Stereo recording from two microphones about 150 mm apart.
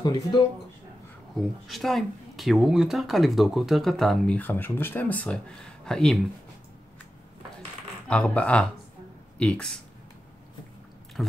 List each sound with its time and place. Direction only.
0.0 s speech: 30° left (ahead or behind)
1.3 s speech: centre (ahead or behind)
4.4 s speech: 10° left (ahead or behind)
8.1 s speech: 10° left (ahead or behind)
11.2 s speech: centre (ahead or behind)